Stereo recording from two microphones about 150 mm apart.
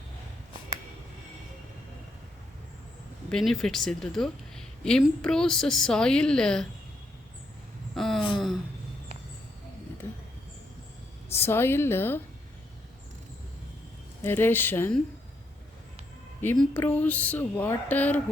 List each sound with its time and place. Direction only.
3.2 s a woman's voice: centre (ahead or behind)
7.9 s a sound: centre (ahead or behind)
11.3 s a woman's voice: 15° left (ahead or behind)
14.3 s speech: 15° left (ahead or behind)
16.6 s speech: 10° left (ahead or behind)